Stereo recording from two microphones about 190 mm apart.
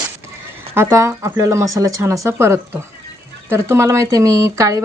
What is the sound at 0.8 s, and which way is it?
Speech, 15° right (ahead or behind).